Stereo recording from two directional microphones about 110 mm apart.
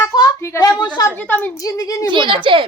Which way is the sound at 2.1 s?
50° right (ahead or behind).